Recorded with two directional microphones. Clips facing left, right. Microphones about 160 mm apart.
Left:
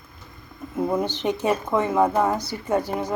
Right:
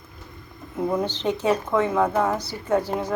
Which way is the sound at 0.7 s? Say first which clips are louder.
Left 1 dB; 10° left (ahead or behind).